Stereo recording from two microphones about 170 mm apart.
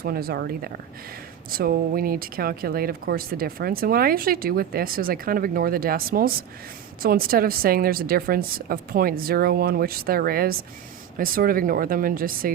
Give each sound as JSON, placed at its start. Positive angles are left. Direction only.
{"t": 0.0, "sound": "speech", "side_deg": -65}